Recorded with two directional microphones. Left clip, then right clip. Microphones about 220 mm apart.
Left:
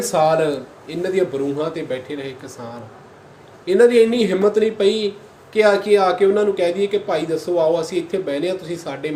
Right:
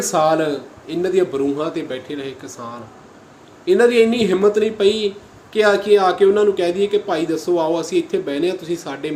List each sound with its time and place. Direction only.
0.0 s speech: 15° right (ahead or behind)
3.7 s speech: 15° right (ahead or behind)